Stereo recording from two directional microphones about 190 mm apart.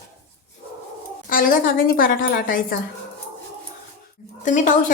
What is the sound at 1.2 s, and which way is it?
A woman's voice, 45° left (ahead or behind).